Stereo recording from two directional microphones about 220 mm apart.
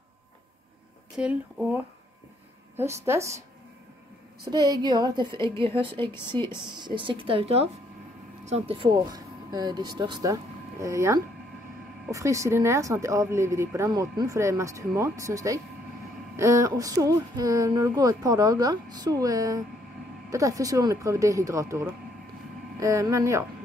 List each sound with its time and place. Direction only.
1.1 s speech: 5° right (ahead or behind)
4.6 s a woman's voice: 20° right (ahead or behind)